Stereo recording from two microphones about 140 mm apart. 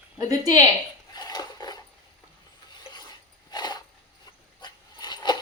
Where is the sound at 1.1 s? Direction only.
30° left (ahead or behind).